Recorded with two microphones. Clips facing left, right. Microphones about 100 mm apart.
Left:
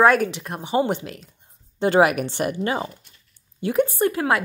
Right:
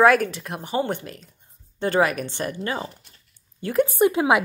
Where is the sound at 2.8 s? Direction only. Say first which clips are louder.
Left 2 dB; 35° right (ahead or behind).